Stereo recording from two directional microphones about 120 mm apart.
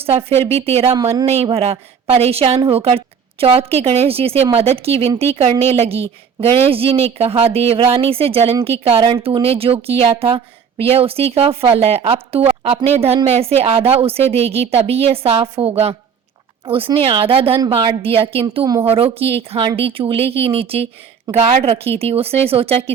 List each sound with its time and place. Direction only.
0.0 s a woman's voice: 55° right (ahead or behind)
18.6 s a woman's voice: 30° right (ahead or behind)
18.9 s a woman's voice: 55° right (ahead or behind)